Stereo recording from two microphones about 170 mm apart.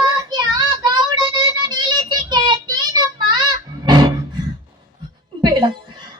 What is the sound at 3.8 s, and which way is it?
Music, 25° right (ahead or behind).